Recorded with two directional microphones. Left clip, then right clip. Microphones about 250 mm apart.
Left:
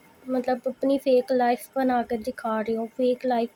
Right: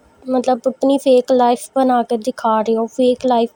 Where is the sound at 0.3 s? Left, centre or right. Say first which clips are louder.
Right 10 dB; right.